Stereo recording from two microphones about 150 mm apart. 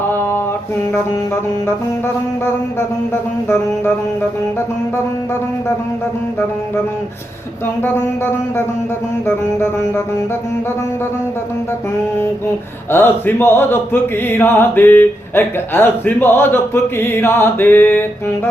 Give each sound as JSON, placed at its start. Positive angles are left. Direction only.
{"t": 0.1, "sound": "mantra", "side_deg": 15}
{"t": 7.8, "sound": "mantra", "side_deg": 15}
{"t": 12.9, "sound": "mantra", "side_deg": 15}